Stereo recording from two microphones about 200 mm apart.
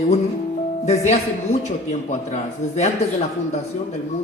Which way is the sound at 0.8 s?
35° left (ahead or behind).